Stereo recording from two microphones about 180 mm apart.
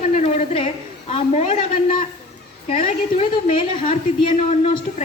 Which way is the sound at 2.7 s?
45° left (ahead or behind).